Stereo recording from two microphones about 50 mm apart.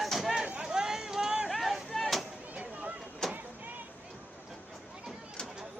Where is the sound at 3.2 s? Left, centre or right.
Centre.